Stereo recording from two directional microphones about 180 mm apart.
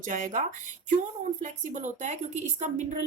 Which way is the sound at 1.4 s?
40° right (ahead or behind).